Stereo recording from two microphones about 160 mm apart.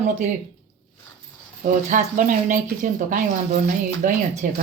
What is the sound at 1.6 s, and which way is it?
Speech, 55° right (ahead or behind).